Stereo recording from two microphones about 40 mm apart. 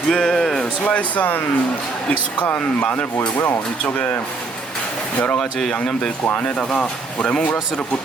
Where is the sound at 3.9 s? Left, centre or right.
Left.